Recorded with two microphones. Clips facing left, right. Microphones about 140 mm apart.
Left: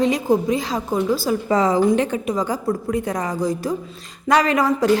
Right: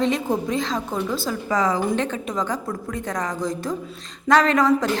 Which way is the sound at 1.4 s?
25° left (ahead or behind).